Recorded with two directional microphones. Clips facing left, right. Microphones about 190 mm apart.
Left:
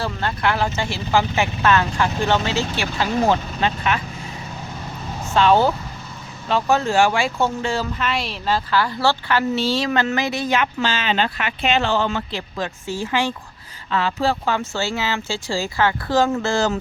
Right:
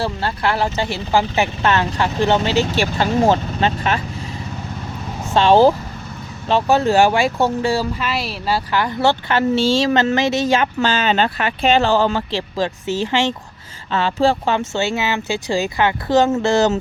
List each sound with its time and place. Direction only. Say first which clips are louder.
0.0 s speech: right 2 dB; 30° right (ahead or behind)
1.6 s speech: left 2 dB; 20° right (ahead or behind)
2.7 s speech: right 4 dB; 35° right (ahead or behind)
5.3 s speech: right 4 dB; 30° right (ahead or behind)
6.7 s speech: right 4 dB; 35° right (ahead or behind)
7.3 s speech: right 4 dB; 15° right (ahead or behind)
7.8 s speech: right 2 dB; 5° right (ahead or behind); by 10.4 s 25° right (ahead or behind)
10.5 s speech: right 4 dB; 40° right (ahead or behind); by 16.7 s 20° right (ahead or behind)